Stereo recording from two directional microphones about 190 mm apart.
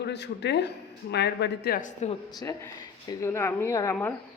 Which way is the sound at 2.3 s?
20° left (ahead or behind).